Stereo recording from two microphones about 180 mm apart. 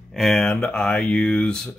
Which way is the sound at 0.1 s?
Centre (ahead or behind).